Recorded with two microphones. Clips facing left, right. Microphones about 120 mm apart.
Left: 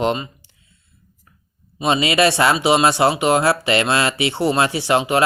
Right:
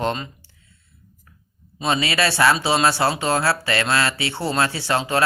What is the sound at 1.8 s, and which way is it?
Speech, 20° left (ahead or behind).